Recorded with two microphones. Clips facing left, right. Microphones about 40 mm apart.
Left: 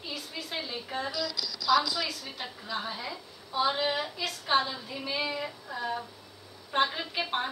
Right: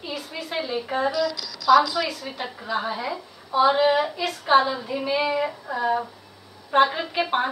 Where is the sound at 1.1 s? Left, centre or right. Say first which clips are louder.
Right 9 dB; right.